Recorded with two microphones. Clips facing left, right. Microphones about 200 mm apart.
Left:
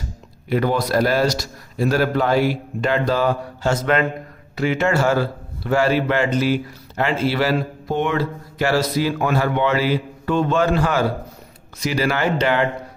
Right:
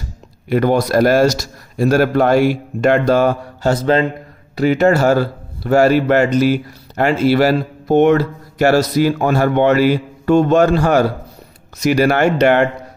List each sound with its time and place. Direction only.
0.5 s a man's voice: 45° right (ahead or behind)